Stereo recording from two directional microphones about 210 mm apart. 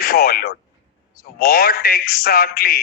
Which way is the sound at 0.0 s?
45° left (ahead or behind).